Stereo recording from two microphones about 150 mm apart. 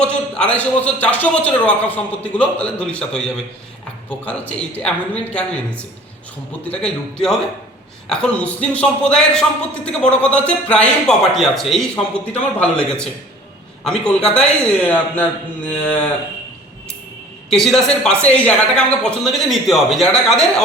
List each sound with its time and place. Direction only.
0.0 s a man's voice: 5° left (ahead or behind)
17.5 s speech: centre (ahead or behind)